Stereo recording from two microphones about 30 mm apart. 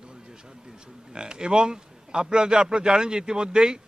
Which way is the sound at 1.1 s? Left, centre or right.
Right.